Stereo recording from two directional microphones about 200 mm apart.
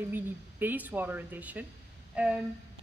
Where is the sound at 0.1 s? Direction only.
10° right (ahead or behind).